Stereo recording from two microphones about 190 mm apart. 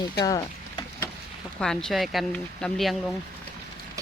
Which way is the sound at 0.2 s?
20° left (ahead or behind).